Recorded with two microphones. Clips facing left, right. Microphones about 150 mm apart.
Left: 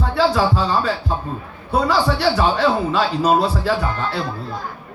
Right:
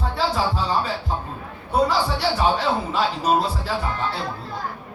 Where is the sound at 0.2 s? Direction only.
90° left.